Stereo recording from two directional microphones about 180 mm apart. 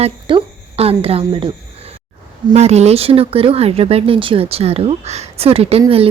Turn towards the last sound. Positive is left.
turn(degrees=-30)  # may be behind; listen again after turning